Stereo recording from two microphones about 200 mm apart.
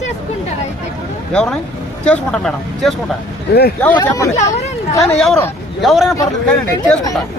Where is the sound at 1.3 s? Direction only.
5° left (ahead or behind).